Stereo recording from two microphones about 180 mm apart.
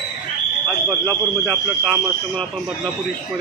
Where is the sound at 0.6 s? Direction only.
10° left (ahead or behind).